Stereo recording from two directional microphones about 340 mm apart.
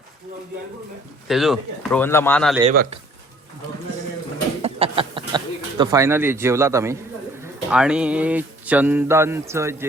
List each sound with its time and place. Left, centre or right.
1.3 s speech: centre
2.6 s a man's voice: centre
4.6 s speech: centre